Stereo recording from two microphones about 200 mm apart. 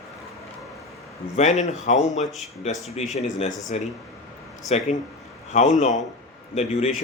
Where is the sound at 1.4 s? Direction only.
35° left (ahead or behind).